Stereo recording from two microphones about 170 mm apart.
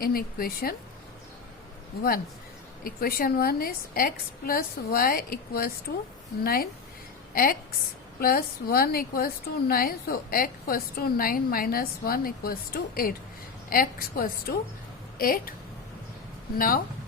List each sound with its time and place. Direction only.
0.0 s a woman's voice: 60° left (ahead or behind)
2.8 s a woman's voice: 60° left (ahead or behind)
8.2 s a woman's voice: 60° left (ahead or behind)
15.2 s a woman's voice: 55° left (ahead or behind)
16.6 s a woman's voice: 55° left (ahead or behind)